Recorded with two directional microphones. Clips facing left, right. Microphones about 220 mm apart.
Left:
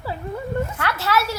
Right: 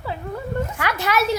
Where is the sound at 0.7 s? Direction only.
15° right (ahead or behind).